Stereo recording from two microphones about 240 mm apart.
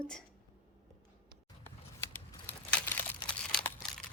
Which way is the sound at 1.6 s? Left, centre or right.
Centre.